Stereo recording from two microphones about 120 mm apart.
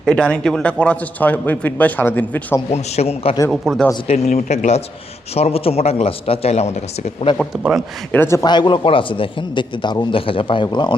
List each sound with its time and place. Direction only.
0.0 s a man's voice: 5° left (ahead or behind)
2.7 s a man's voice: 65° left (ahead or behind)
3.5 s speech: centre (ahead or behind)
4.0 s a man's voice: 65° left (ahead or behind)
5.3 s a man's voice: 55° left (ahead or behind)
7.6 s speech: 5° right (ahead or behind)
8.1 s a man's voice: 20° left (ahead or behind)
8.4 s a man's voice: 40° left (ahead or behind)